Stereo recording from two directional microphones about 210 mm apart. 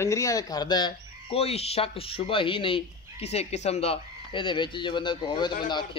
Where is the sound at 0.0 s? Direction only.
15° left (ahead or behind).